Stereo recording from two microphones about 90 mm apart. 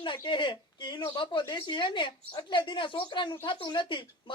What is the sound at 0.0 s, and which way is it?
Speech, 65° left (ahead or behind).